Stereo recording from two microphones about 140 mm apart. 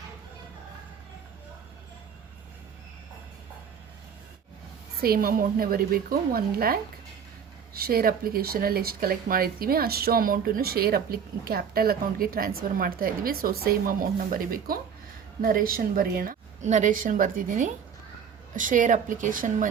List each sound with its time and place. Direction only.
5.0 s a woman's voice: 90° right; by 19.6 s 70° right (ahead or behind)